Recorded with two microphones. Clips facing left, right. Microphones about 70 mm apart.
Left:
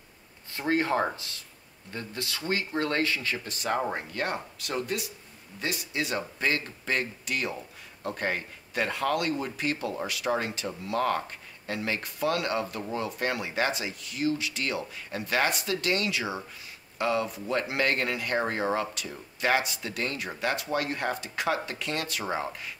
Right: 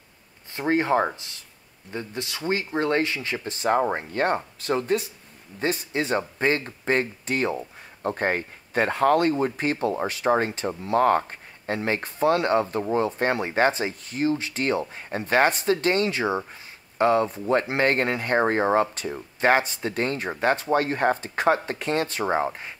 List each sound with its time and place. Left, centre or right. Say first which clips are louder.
0.5 s speech: right 4 dB; right